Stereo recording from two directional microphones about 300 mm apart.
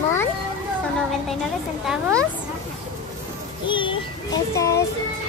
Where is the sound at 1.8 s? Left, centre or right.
Centre.